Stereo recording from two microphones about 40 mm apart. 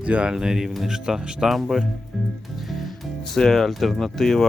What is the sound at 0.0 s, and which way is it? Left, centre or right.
Speech, right.